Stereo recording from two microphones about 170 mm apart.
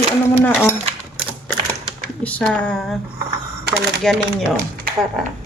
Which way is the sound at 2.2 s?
10° left (ahead or behind).